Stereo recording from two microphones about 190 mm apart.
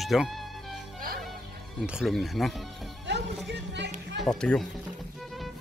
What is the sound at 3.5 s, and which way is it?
Speech, 60° right (ahead or behind).